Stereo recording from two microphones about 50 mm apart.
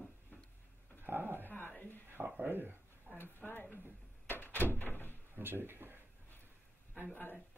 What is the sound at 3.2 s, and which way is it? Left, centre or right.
Speech, left.